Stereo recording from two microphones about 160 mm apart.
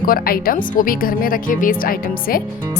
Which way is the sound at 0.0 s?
65° left (ahead or behind).